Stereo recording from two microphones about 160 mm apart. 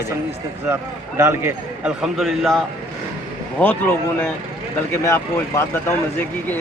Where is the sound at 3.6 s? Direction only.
15° left (ahead or behind).